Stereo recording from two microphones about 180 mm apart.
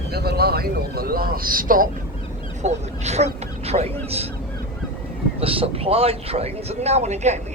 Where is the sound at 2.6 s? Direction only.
40° right (ahead or behind).